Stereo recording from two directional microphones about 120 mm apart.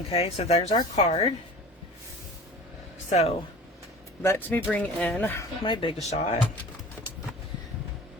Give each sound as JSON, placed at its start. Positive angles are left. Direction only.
{"t": 0.1, "sound": "speech", "side_deg": 55}
{"t": 3.1, "sound": "speech", "side_deg": 65}
{"t": 4.2, "sound": "speech", "side_deg": 20}
{"t": 5.6, "sound": "speech", "side_deg": 45}
{"t": 6.0, "sound": "speech", "side_deg": 65}